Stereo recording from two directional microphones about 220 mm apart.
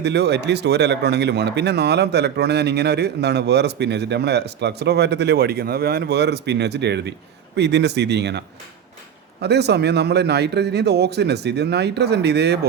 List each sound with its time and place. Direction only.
0.0 s speech: 50° right (ahead or behind)